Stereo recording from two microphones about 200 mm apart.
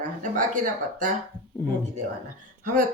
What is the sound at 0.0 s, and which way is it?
Speech, 40° right (ahead or behind).